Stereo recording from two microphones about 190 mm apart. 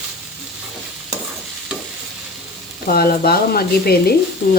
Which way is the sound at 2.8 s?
50° left (ahead or behind).